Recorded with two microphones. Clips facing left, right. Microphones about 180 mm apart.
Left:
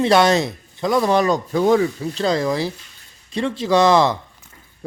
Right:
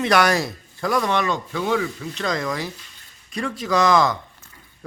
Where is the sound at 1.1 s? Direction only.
40° left (ahead or behind).